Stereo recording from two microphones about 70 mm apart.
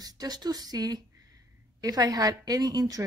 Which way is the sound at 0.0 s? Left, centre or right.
Right.